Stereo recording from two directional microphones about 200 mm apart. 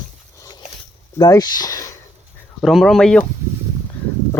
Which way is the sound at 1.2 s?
20° left (ahead or behind).